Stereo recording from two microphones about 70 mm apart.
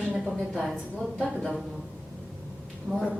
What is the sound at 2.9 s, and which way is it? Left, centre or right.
Speech, centre.